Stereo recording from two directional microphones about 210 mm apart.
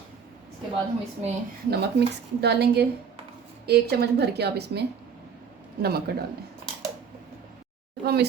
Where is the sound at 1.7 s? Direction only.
50° right (ahead or behind).